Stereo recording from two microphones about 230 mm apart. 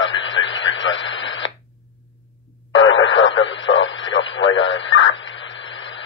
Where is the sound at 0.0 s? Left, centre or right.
Left.